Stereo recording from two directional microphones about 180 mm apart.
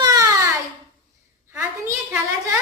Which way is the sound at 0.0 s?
20° right (ahead or behind).